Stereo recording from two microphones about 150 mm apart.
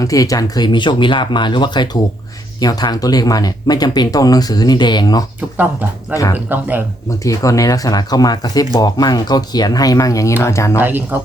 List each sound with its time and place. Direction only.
0.0 s speech: 20° left (ahead or behind)
6.3 s speech: 10° right (ahead or behind)
7.3 s speech: 20° left (ahead or behind)
10.8 s speech: 10° right (ahead or behind)